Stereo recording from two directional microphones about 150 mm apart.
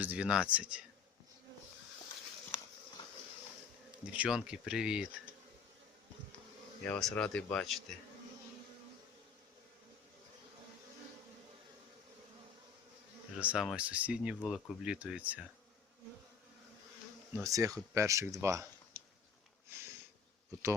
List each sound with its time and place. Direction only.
0.0 s speech: 10° right (ahead or behind)
4.0 s speech: 10° right (ahead or behind)
6.8 s speech: 10° left (ahead or behind)
13.3 s speech: 5° right (ahead or behind)
17.4 s speech: 20° right (ahead or behind)
19.7 s a sound: 15° right (ahead or behind)